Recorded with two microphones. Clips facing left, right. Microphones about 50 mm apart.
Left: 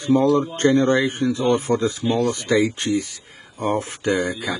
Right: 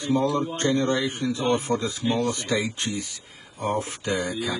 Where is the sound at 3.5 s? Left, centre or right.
Left.